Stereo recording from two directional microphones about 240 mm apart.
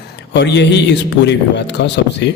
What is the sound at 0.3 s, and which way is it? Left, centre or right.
A man's voice, left.